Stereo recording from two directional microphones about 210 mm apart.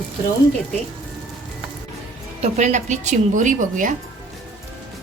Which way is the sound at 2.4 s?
35° right (ahead or behind).